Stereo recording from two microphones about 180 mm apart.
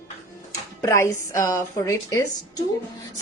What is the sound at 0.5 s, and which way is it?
A woman's voice, 15° left (ahead or behind).